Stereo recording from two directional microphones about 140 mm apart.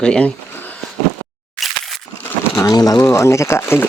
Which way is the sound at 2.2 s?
15° left (ahead or behind).